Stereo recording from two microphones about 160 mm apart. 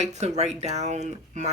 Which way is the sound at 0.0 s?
45° right (ahead or behind).